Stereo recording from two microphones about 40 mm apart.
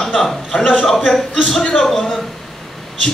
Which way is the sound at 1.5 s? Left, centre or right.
Centre.